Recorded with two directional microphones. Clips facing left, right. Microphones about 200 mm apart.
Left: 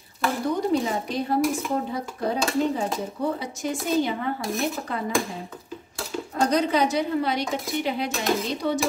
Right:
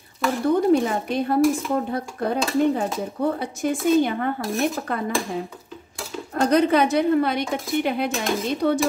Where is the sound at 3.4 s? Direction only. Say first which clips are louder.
Right 5 dB; 55° right (ahead or behind).